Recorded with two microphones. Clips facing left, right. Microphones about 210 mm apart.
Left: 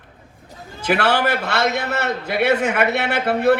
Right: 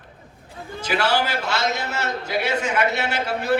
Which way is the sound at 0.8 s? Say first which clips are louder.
Left 4 dB; 60° left (ahead or behind).